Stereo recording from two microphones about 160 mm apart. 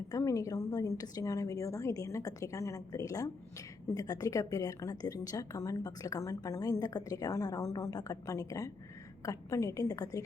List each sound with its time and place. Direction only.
0.1 s a woman's voice: 20° left (ahead or behind)